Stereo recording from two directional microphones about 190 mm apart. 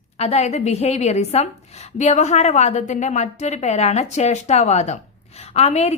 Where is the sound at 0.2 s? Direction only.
35° left (ahead or behind).